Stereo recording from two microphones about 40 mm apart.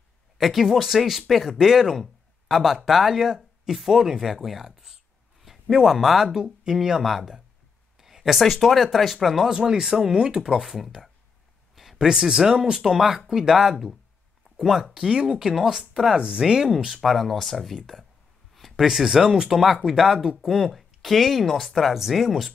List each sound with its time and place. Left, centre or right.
0.4 s speech: centre
8.0 s a sound: centre
8.5 s speech: centre
9.5 s speech: centre
11.7 s a sound: centre
12.1 s speech: centre
15.0 s speech: centre
15.2 s speech: centre
16.2 s speech: right
16.9 s speech: centre
18.5 s a sound: centre
19.0 s speech: centre